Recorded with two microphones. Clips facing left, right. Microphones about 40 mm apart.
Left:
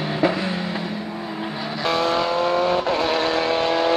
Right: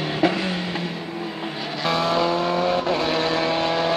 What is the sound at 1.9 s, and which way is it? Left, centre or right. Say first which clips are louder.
Vehicle: even; centre.